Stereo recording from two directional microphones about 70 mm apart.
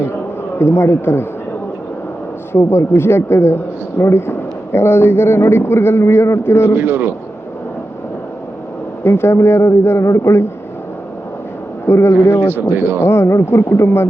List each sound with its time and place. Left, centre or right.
0.6 s a woman's voice: left
2.5 s a woman's voice: left
6.7 s a man's voice: right
9.0 s a woman's voice: left
11.9 s a woman's voice: left